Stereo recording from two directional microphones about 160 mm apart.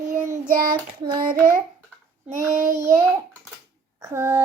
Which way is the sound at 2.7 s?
20° right (ahead or behind).